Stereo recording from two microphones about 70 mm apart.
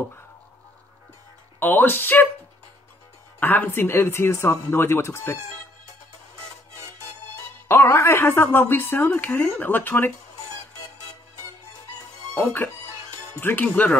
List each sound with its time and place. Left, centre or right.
1.6 s speech: left
3.3 s a woman's voice: left
7.6 s a woman's voice: left
12.4 s a woman's voice: left
13.7 s speech: centre